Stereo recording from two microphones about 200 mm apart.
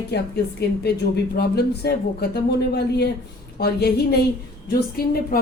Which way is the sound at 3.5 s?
50° left (ahead or behind).